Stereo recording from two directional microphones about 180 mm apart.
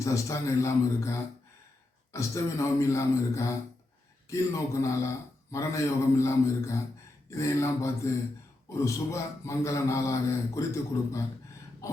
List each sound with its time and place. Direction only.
0.0 s a man's voice: 15° left (ahead or behind)